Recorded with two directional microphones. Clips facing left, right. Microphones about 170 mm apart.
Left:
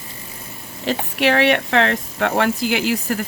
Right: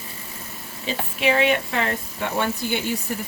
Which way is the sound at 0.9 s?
75° left (ahead or behind).